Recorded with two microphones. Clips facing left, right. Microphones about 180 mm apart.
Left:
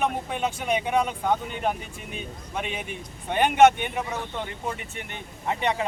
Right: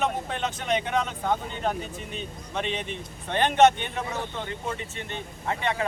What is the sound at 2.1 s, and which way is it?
Speech, 10° left (ahead or behind).